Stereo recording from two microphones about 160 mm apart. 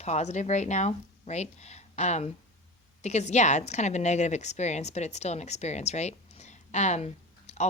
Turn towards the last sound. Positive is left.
turn(degrees=45)  # may be behind; listen again after turning